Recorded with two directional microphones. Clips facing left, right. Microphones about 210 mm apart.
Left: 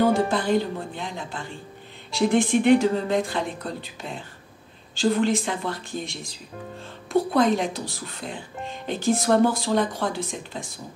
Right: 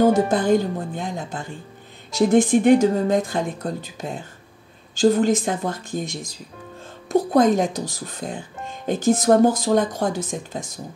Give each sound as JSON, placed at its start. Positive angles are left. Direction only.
{"t": 0.0, "sound": "speech", "side_deg": -45}